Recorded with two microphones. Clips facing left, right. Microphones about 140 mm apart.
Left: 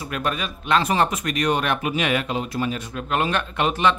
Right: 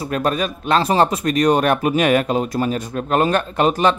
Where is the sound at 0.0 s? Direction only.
35° right (ahead or behind).